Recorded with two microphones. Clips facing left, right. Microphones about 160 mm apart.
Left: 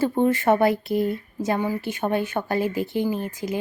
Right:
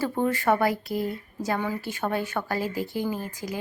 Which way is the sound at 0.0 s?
25° left (ahead or behind).